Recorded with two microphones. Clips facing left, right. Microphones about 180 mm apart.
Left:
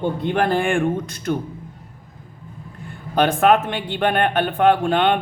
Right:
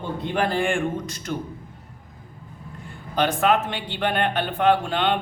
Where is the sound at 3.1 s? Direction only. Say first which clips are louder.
Left 5 dB; 55° left (ahead or behind).